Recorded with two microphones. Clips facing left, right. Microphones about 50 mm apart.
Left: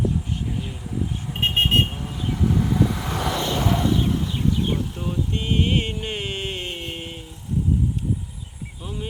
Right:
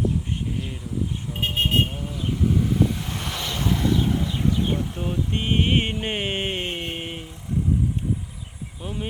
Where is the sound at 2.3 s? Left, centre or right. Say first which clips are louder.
Left 1 dB; left.